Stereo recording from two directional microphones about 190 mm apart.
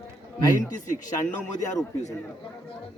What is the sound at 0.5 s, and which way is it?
A man's voice, 40° left (ahead or behind).